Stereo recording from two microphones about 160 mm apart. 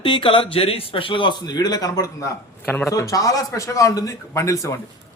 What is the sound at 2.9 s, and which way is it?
A man's voice, 20° left (ahead or behind).